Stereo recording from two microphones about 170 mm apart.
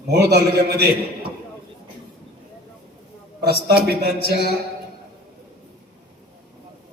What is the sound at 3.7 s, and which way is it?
Speech, 70° right (ahead or behind).